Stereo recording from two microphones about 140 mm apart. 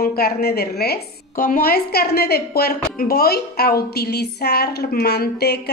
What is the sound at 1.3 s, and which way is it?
A woman's voice, 80° left.